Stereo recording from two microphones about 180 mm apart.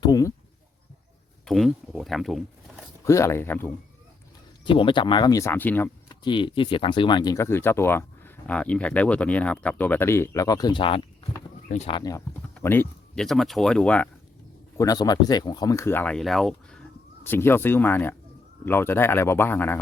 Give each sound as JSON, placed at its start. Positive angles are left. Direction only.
{"t": 0.0, "sound": "a sound", "side_deg": 20}
{"t": 1.5, "sound": "speech", "side_deg": 0}
{"t": 3.0, "sound": "speech", "side_deg": 15}
{"t": 4.6, "sound": "speech", "side_deg": 30}
{"t": 6.2, "sound": "speech", "side_deg": 25}
{"t": 12.5, "sound": "speech", "side_deg": 10}
{"t": 14.8, "sound": "speech", "side_deg": 20}